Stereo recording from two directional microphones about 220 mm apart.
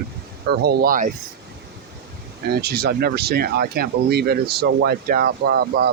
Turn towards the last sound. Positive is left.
turn(degrees=-45)  # may be behind; listen again after turning